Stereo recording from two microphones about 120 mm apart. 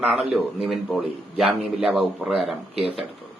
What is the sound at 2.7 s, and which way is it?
Speech, 55° right (ahead or behind).